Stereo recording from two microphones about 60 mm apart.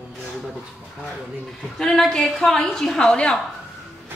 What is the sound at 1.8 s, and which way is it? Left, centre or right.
A woman's voice, centre.